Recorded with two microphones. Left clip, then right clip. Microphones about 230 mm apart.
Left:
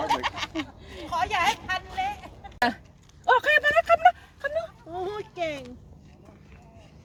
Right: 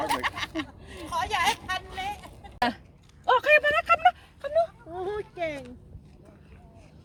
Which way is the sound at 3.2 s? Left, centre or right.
Centre.